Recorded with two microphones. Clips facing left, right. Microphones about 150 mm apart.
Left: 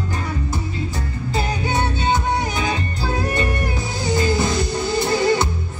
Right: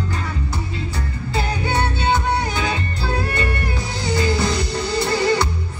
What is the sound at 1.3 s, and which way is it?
Music, 15° left (ahead or behind).